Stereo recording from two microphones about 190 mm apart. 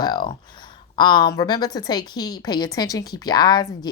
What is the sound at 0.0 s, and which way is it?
Speech, 25° left (ahead or behind).